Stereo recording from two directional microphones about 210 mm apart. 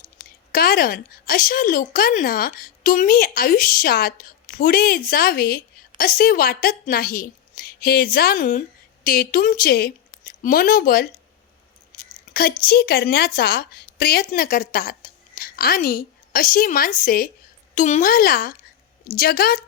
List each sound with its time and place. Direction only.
0.2 s a woman's voice: 45° left (ahead or behind)
12.3 s a woman's voice: 45° left (ahead or behind)